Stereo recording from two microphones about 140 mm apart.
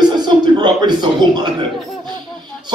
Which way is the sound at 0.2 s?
30° right (ahead or behind).